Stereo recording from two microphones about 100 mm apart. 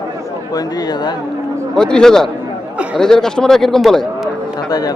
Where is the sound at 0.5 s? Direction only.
40° left (ahead or behind).